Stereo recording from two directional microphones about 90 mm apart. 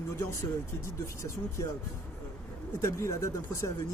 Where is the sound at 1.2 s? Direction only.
35° left (ahead or behind).